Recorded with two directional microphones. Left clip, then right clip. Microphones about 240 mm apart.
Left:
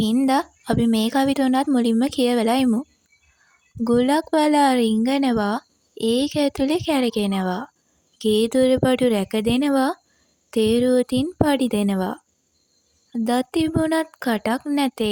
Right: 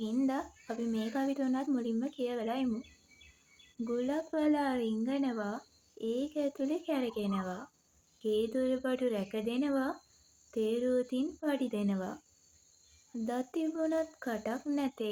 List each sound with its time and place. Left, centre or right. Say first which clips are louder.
0.0 s a woman's voice: left 14 dB; left
3.8 s a woman's voice: left 16 dB; left
13.2 s a woman's voice: left 14 dB; left